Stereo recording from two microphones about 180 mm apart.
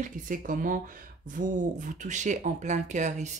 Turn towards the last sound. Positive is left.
turn(degrees=-40)  # may be behind; listen again after turning